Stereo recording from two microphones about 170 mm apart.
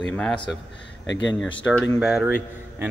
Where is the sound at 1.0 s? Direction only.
90° left.